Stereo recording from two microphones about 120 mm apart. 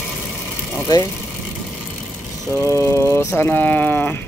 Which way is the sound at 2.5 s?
20° left (ahead or behind).